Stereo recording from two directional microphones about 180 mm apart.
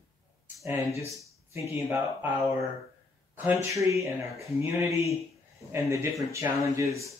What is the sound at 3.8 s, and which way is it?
Speech, 15° right (ahead or behind).